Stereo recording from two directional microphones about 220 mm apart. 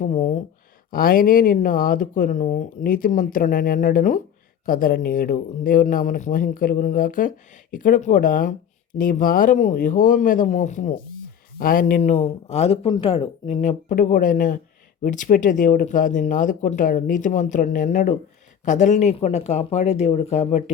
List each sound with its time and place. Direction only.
0.0 s speech: 35° left (ahead or behind)